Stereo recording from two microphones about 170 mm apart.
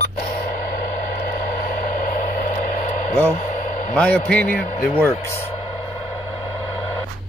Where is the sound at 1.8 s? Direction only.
55° left (ahead or behind).